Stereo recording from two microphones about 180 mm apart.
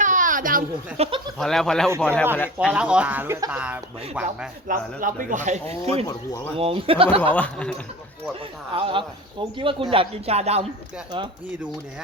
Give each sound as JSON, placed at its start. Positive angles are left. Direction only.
{"t": 0.0, "sound": "a sound", "side_deg": -45}
{"t": 0.9, "sound": "speech", "side_deg": -35}
{"t": 1.4, "sound": "speech", "side_deg": 5}
{"t": 4.7, "sound": "speech", "side_deg": -50}
{"t": 6.1, "sound": "speech", "side_deg": 20}
{"t": 6.6, "sound": "speech", "side_deg": -30}
{"t": 7.3, "sound": "speech", "side_deg": 5}
{"t": 8.7, "sound": "speech", "side_deg": -30}